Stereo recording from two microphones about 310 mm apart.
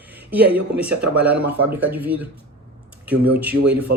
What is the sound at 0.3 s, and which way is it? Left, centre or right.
Speech, centre.